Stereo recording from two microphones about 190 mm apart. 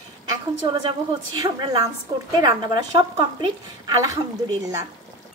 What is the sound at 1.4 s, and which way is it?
A woman's voice, 20° right (ahead or behind).